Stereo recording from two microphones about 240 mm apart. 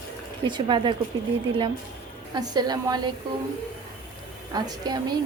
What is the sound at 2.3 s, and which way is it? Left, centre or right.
Speech, centre.